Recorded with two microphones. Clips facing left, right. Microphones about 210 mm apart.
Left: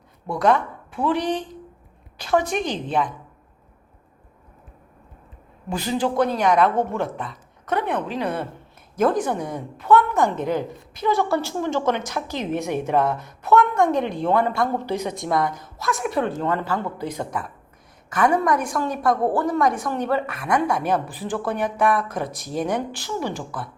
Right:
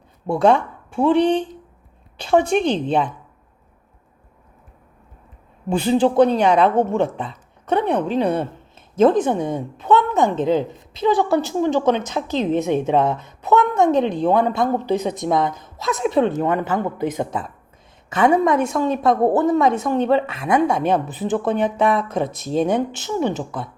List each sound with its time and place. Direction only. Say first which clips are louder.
0.3 s a woman's voice: right 4 dB; 25° right (ahead or behind)
5.6 s a woman's voice: right 7 dB; 25° right (ahead or behind)